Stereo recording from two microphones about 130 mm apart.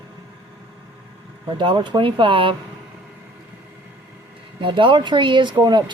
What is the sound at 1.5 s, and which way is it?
Speech, 40° right (ahead or behind).